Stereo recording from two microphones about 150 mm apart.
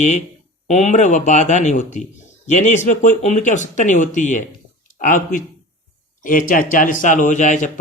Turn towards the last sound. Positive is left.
turn(degrees=55)  # may be behind; listen again after turning